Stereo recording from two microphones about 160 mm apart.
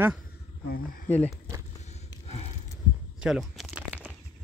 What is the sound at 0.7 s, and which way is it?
Speech, 65° left (ahead or behind).